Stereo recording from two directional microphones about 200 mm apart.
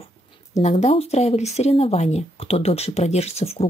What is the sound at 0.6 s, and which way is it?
Speech, 35° left (ahead or behind).